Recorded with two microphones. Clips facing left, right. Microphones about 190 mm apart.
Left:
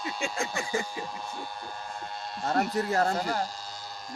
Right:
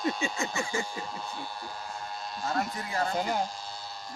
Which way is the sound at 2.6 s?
65° left (ahead or behind).